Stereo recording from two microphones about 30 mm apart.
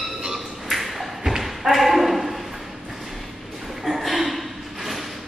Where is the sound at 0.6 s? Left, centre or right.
Centre.